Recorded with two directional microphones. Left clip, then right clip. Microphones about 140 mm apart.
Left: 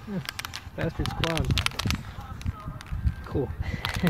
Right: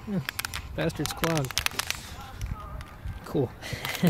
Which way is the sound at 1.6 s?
30° right (ahead or behind).